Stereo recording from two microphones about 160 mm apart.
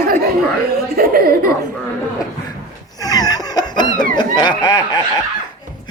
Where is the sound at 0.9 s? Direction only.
70° right (ahead or behind).